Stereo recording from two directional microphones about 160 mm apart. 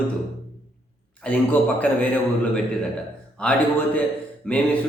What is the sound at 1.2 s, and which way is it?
Speech, 10° left (ahead or behind).